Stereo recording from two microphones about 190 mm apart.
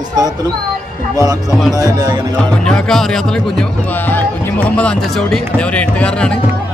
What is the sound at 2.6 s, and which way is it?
Speech, 5° left (ahead or behind).